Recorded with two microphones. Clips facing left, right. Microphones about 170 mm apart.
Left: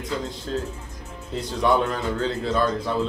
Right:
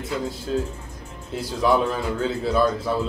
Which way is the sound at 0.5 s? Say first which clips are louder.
Right 3 dB; 5° right (ahead or behind).